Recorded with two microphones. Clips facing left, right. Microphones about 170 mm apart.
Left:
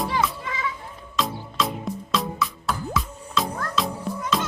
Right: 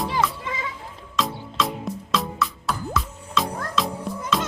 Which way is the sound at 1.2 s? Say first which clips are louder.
Right 1 dB; centre (ahead or behind).